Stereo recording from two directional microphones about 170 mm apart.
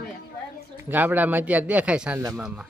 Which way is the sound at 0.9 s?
10° right (ahead or behind).